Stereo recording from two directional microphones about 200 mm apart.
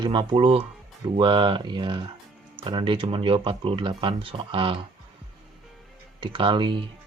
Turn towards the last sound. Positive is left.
turn(degrees=-25)  # may be behind; listen again after turning